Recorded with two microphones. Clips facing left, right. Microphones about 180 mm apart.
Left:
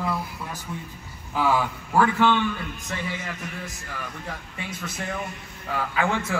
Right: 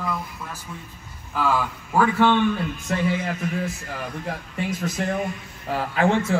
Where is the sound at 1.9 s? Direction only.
15° right (ahead or behind).